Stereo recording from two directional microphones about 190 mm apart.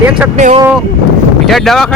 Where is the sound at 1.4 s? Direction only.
Centre (ahead or behind).